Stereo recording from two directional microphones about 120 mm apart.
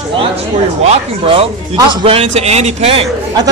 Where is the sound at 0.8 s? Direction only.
55° right (ahead or behind).